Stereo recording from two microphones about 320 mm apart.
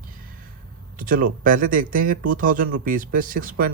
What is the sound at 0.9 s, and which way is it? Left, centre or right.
Speech, right.